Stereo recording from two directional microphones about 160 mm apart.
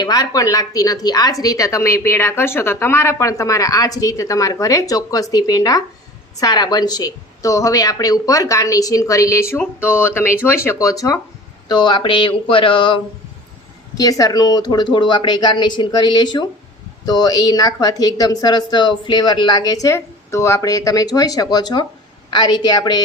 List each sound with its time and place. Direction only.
0.0 s a woman's voice: 25° left (ahead or behind)
11.7 s a sound: 30° left (ahead or behind)
13.9 s a woman's voice: 20° left (ahead or behind)